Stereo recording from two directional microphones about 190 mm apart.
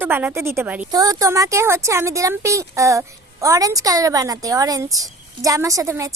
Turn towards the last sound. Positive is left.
turn(degrees=-15)  # may be behind; listen again after turning